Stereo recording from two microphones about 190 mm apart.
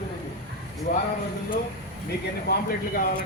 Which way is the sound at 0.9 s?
40° left (ahead or behind).